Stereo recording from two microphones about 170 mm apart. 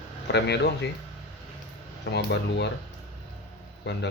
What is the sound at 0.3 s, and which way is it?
Speech, 85° left.